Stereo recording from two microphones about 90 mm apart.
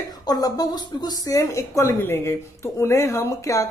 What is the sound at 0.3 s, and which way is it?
A woman's voice, 45° left (ahead or behind).